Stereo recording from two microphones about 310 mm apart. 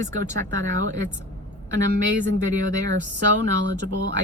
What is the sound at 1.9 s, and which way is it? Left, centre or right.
Speech, right.